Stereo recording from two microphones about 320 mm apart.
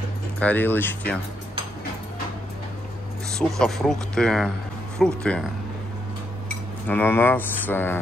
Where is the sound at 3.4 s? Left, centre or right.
Centre.